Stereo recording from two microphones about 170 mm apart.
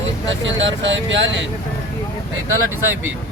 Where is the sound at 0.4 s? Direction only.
90° right.